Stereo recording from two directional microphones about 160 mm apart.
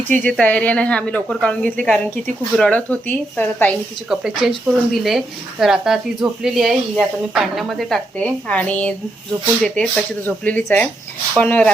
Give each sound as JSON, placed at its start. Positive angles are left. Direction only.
{"t": 0.1, "sound": "speech", "side_deg": 5}
{"t": 4.1, "sound": "speech", "side_deg": -5}